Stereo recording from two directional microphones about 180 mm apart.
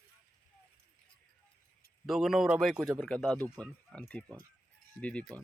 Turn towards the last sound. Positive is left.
turn(degrees=5)  # may be behind; listen again after turning